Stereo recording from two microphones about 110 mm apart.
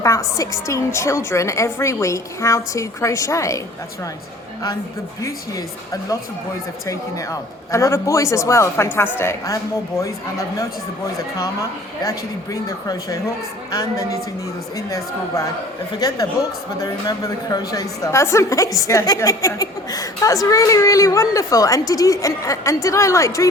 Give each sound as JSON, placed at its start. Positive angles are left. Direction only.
{"t": 0.0, "sound": "a woman's voice", "side_deg": 30}
{"t": 5.2, "sound": "a woman's voice", "side_deg": 30}
{"t": 12.0, "sound": "a woman's voice", "side_deg": 35}
{"t": 14.8, "sound": "a woman's voice", "side_deg": 30}